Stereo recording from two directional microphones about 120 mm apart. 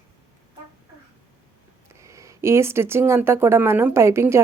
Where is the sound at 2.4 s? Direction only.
20° right (ahead or behind).